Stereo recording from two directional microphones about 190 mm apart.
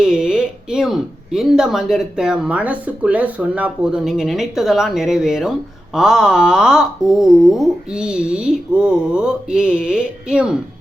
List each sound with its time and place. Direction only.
0.0 s speech: 5° right (ahead or behind)